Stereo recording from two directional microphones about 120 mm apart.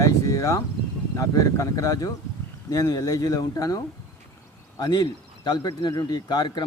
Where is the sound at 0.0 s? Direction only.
30° left (ahead or behind).